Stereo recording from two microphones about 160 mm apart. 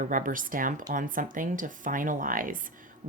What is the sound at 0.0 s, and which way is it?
Speech, 55° right (ahead or behind).